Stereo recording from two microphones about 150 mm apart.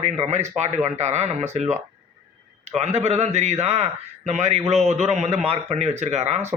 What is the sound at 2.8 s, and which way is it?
A man's voice, 45° right (ahead or behind).